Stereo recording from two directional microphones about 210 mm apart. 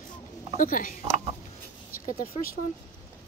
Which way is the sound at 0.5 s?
40° left (ahead or behind).